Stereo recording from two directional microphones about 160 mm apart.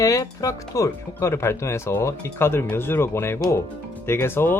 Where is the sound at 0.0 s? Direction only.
20° left (ahead or behind).